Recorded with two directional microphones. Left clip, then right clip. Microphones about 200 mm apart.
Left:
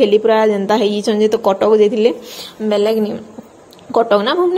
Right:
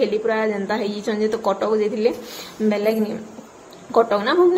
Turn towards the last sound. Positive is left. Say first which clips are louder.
# left 4 dB
turn(degrees=30)  # may be behind; listen again after turning